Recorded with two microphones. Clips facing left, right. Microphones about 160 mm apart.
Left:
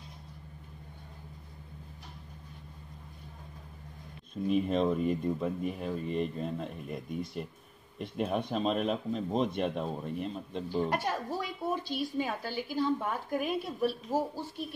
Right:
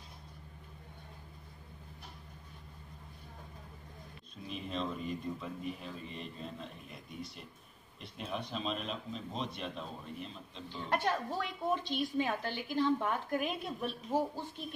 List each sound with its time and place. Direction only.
4.5 s speech: 50° left (ahead or behind)
10.9 s a woman's voice: 10° left (ahead or behind)